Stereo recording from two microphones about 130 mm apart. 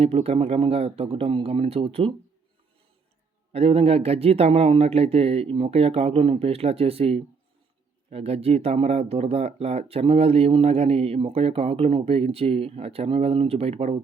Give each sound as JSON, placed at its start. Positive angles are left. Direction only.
{"t": 0.0, "sound": "speech", "side_deg": -50}
{"t": 3.5, "sound": "speech", "side_deg": -50}